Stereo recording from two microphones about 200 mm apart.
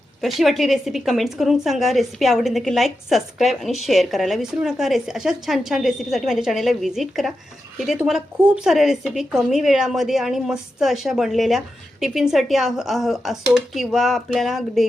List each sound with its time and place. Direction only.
0.2 s a woman's voice: centre (ahead or behind)